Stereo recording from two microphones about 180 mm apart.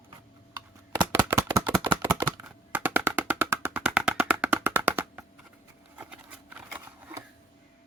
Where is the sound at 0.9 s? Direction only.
15° right (ahead or behind).